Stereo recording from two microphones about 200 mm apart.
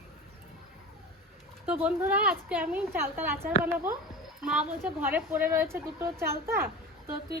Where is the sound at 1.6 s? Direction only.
5° right (ahead or behind).